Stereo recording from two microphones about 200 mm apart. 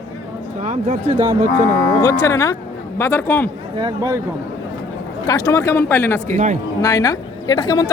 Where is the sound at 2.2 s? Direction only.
15° left (ahead or behind).